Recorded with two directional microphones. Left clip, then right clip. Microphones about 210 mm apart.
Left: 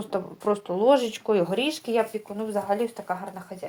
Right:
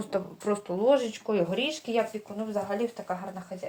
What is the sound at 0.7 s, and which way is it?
Speech, 35° left (ahead or behind).